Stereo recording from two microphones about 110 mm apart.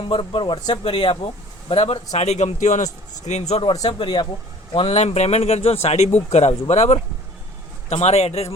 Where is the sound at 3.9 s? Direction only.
45° left (ahead or behind).